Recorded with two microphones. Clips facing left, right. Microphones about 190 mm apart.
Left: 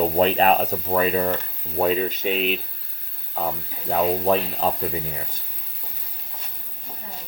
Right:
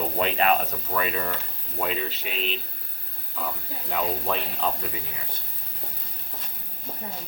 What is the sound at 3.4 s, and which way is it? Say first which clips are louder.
Speech: left 6 dB; 40° left (ahead or behind).